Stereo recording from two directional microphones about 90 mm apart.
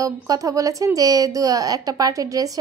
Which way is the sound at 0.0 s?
40° right (ahead or behind).